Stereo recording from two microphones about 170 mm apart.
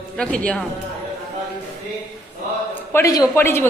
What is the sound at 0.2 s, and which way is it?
Speech, 5° left (ahead or behind).